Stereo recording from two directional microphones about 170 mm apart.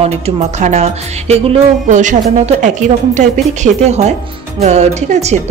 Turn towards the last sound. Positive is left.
turn(degrees=-40)  # may be behind; listen again after turning